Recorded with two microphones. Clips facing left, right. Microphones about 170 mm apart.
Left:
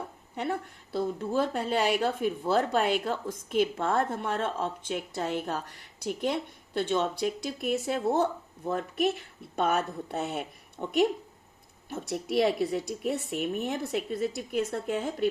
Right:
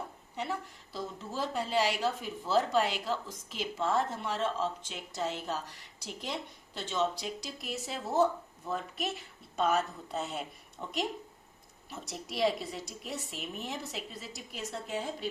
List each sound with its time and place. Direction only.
0.3 s speech: 55° left (ahead or behind)
12.0 s speech: 60° left (ahead or behind)